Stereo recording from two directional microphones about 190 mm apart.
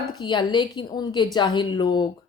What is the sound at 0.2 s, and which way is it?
A woman's voice, 20° left (ahead or behind).